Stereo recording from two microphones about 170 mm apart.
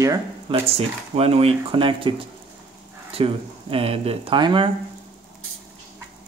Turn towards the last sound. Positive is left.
turn(degrees=-30)  # may be behind; listen again after turning